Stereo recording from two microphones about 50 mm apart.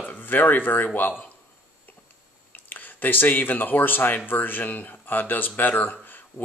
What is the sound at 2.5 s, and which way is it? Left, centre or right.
Speech, left.